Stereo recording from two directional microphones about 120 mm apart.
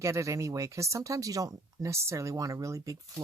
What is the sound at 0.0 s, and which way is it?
Speech, 25° right (ahead or behind).